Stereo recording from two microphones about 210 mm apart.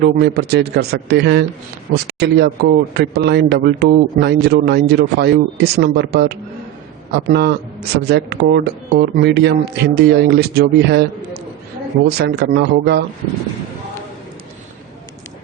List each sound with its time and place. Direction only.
0.0 s speech: 50° right (ahead or behind)
12.1 s speech: 50° right (ahead or behind)